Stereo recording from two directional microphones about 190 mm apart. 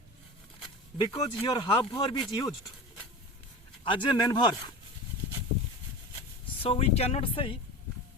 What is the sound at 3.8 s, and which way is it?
Speech, 25° left (ahead or behind).